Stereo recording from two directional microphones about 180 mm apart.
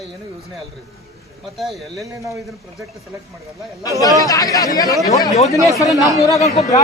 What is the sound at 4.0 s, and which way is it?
A man's voice, 20° left (ahead or behind).